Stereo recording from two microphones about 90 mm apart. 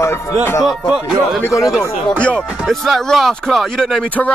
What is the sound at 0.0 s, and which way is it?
Music, 35° left (ahead or behind).